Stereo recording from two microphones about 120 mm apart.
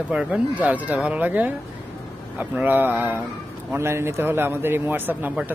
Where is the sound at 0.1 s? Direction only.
10° right (ahead or behind).